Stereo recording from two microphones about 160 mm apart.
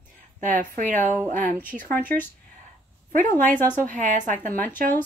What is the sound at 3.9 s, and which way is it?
Speech, 50° right (ahead or behind).